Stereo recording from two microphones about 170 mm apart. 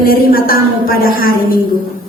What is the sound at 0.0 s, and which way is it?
A woman's voice, 60° left (ahead or behind).